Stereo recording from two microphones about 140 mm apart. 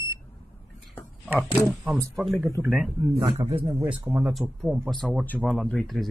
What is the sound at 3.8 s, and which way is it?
Speech, 10° right (ahead or behind).